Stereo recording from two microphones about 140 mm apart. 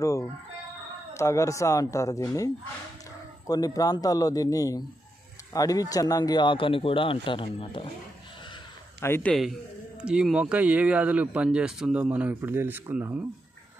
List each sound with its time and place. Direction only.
0.0 s chicken: 20° left (ahead or behind)
1.1 s a man's voice: 20° left (ahead or behind); by 7.9 s 40° left (ahead or behind)
9.0 s a man's voice: 15° left (ahead or behind)
9.3 s a man's voice: centre (ahead or behind)